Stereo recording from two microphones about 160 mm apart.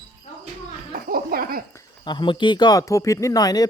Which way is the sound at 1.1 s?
65° right (ahead or behind).